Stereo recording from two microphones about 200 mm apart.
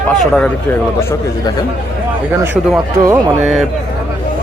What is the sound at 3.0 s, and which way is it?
Speech, 15° right (ahead or behind).